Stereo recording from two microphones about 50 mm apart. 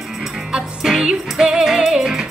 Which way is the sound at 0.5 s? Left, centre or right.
Centre.